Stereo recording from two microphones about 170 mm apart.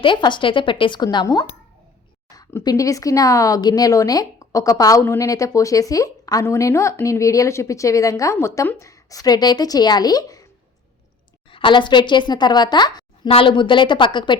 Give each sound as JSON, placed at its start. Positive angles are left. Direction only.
{"t": 0.0, "sound": "a woman's voice", "side_deg": 30}
{"t": 11.5, "sound": "a woman's voice", "side_deg": 30}